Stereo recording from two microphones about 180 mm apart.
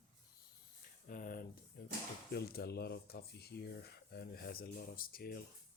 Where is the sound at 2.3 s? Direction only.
60° left (ahead or behind).